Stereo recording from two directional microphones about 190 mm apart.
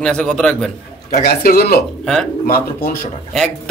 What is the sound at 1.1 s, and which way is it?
Speech, 50° left (ahead or behind).